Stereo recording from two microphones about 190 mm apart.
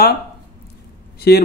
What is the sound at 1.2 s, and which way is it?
Speech, 55° left (ahead or behind).